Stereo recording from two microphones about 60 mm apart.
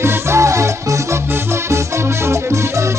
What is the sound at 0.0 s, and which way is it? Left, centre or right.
Music, right.